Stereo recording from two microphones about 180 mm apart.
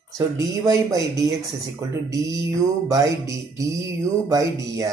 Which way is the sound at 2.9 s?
20° right (ahead or behind).